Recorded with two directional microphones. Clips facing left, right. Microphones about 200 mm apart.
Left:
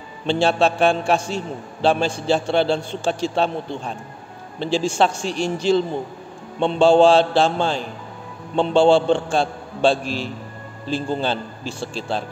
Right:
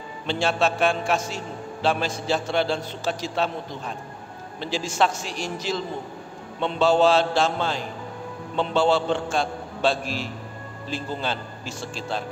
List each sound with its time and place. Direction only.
0.3 s a man's voice: 30° left (ahead or behind)
4.6 s a man's voice: 30° left (ahead or behind)
10.0 s a man's voice: 5° right (ahead or behind)
10.9 s a man's voice: 30° left (ahead or behind)